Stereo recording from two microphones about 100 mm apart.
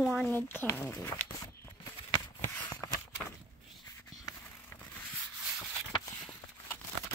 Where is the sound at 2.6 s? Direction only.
40° left (ahead or behind).